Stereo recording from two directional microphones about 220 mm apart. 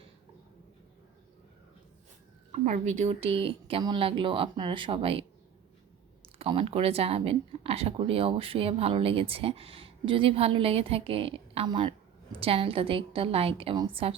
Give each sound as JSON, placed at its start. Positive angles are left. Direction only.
{"t": 2.5, "sound": "speech", "side_deg": -30}
{"t": 6.2, "sound": "speech", "side_deg": -25}